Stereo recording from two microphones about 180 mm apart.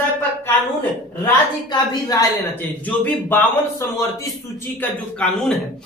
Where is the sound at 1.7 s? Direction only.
20° left (ahead or behind).